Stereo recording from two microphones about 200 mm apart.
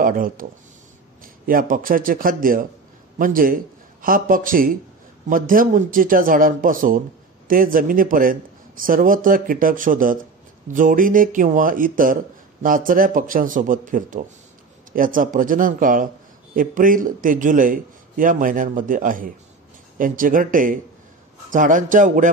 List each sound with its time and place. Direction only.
0.0 s a man's voice: 45° right (ahead or behind)